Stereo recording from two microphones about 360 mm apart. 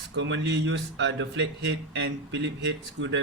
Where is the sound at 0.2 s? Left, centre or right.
Right.